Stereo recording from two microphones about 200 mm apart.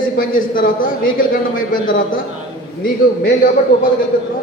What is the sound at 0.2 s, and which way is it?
Speech, 45° left (ahead or behind).